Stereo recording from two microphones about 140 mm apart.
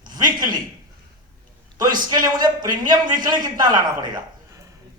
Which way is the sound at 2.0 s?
30° right (ahead or behind).